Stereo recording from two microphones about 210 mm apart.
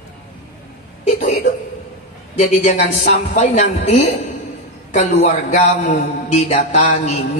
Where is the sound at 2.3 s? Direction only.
35° left (ahead or behind).